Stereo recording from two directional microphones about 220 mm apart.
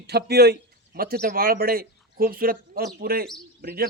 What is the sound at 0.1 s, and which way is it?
A man's voice, 45° right (ahead or behind).